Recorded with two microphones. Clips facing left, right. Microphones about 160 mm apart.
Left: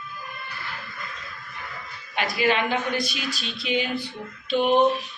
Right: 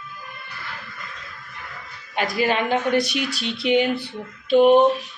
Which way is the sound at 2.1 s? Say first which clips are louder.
Right 2 dB; 45° right (ahead or behind).